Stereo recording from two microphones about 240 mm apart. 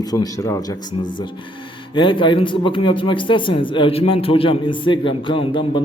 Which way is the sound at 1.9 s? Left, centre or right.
Centre.